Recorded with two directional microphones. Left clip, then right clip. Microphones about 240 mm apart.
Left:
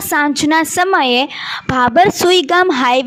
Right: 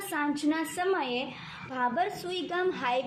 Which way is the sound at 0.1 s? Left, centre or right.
Left.